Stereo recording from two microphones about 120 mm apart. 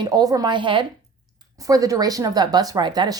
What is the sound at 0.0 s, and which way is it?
Speech, 30° right (ahead or behind).